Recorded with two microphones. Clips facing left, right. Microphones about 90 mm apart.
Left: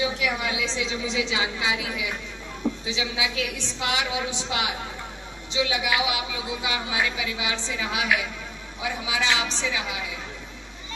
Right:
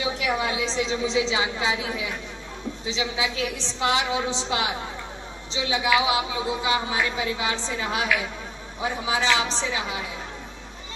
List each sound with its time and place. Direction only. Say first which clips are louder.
0.2 s a woman's voice: right 2 dB; 35° right (ahead or behind)